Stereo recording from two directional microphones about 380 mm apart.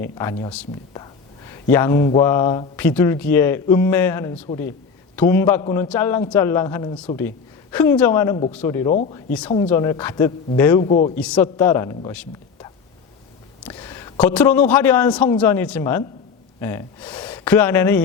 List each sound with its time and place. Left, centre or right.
0.0 s a man's voice: centre
11.2 s a man's voice: centre